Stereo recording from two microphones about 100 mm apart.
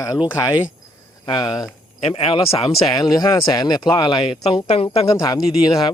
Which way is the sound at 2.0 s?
80° left.